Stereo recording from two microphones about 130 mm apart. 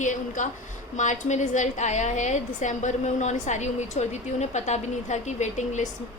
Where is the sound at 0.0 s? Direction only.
70° left (ahead or behind).